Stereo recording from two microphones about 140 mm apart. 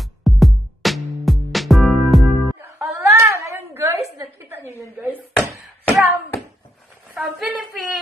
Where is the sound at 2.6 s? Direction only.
20° right (ahead or behind).